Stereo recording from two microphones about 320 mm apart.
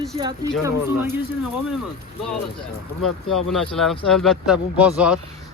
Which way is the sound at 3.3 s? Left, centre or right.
Centre.